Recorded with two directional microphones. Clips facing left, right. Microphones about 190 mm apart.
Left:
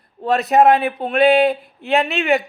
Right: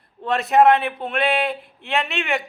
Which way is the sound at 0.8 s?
35° left (ahead or behind).